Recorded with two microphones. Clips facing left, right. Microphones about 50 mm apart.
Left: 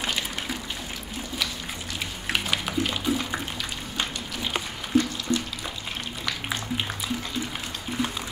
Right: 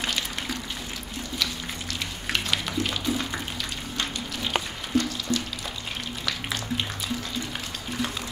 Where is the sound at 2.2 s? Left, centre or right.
Centre.